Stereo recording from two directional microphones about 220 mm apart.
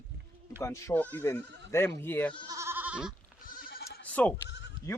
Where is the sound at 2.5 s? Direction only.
10° right (ahead or behind).